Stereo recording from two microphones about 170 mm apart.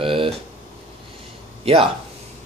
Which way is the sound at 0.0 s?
30° right (ahead or behind).